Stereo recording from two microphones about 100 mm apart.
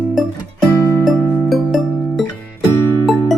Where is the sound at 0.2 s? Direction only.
Centre (ahead or behind).